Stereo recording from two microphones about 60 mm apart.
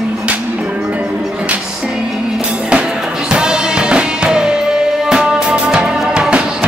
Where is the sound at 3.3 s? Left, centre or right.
Centre.